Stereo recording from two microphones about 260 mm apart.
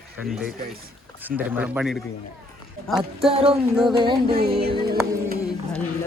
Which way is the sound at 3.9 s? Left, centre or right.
Centre.